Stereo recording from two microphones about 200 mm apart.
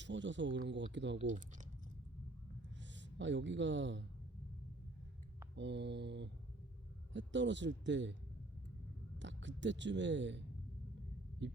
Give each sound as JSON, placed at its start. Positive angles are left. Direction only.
{"t": 0.0, "sound": "speech", "side_deg": -65}
{"t": 1.2, "sound": "speech", "side_deg": -40}
{"t": 2.9, "sound": "speech", "side_deg": -65}
{"t": 5.5, "sound": "speech", "side_deg": -60}
{"t": 9.1, "sound": "speech", "side_deg": -65}